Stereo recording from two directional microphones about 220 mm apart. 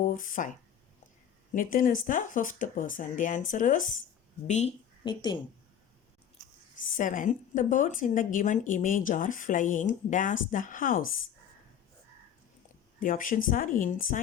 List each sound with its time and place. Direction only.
0.0 s a woman's voice: 35° left (ahead or behind)
1.5 s a woman's voice: 40° left (ahead or behind)
5.0 s speech: 20° left (ahead or behind)
6.7 s a woman's voice: 40° left (ahead or behind)
13.0 s a woman's voice: 40° left (ahead or behind)